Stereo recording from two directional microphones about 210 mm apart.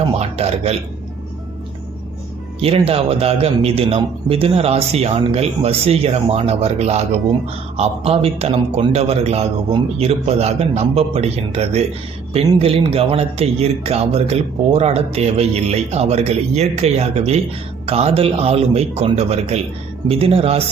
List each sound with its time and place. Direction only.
0.1 s a man's voice: 30° right (ahead or behind)
2.6 s a man's voice: 30° right (ahead or behind)